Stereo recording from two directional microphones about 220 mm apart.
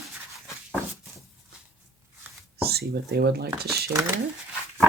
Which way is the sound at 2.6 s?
45° right (ahead or behind).